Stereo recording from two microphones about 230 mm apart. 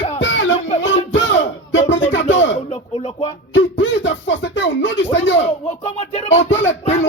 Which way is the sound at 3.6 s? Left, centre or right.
Left.